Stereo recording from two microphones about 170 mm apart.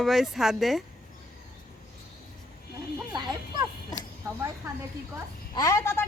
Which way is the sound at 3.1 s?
25° right (ahead or behind).